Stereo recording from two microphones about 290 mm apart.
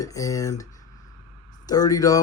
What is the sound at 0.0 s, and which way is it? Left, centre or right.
Speech, centre.